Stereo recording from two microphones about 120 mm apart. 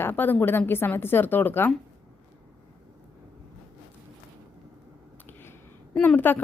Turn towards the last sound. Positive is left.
turn(degrees=15)  # may be behind; listen again after turning